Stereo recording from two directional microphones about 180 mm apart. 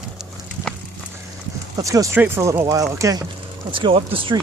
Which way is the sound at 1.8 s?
20° right (ahead or behind).